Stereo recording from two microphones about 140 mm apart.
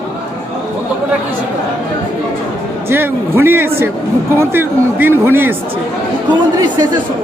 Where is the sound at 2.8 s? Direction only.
15° right (ahead or behind).